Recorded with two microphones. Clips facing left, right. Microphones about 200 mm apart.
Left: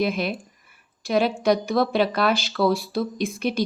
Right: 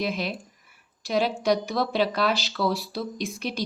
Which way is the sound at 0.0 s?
55° left (ahead or behind).